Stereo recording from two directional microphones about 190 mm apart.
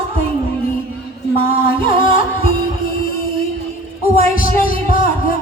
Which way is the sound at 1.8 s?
45° left (ahead or behind).